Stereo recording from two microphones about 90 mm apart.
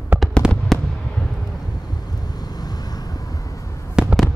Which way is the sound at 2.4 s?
45° left (ahead or behind).